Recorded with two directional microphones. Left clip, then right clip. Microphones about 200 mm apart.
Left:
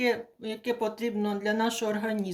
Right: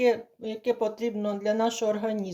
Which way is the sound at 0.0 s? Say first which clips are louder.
Right 4 dB; 40° right (ahead or behind).